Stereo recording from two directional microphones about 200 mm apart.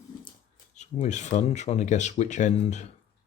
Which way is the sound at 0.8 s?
35° left (ahead or behind).